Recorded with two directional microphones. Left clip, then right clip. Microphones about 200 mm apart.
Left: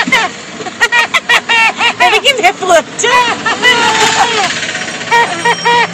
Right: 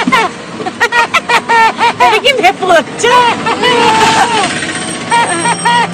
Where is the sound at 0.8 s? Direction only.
5° left (ahead or behind).